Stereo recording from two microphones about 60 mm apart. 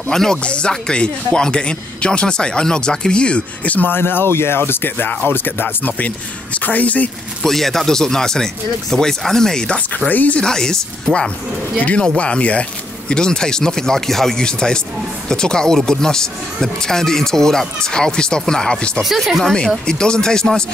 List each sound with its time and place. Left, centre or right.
0.1 s speech: centre; by 7.1 s left
7.4 s speech: centre
10.0 s speech: left
10.4 s speech: centre
11.8 s speech: centre
19.0 s speech: centre
19.4 s speech: centre